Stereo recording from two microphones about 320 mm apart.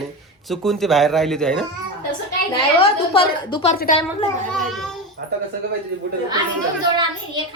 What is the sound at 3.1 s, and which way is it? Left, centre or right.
Speech, centre.